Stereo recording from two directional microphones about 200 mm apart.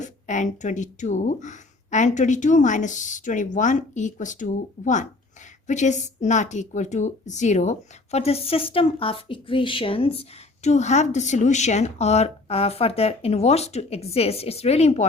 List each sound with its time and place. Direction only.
0.0 s a woman's voice: 40° left (ahead or behind)